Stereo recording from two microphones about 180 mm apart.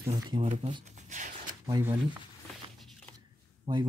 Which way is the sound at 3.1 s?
25° right (ahead or behind).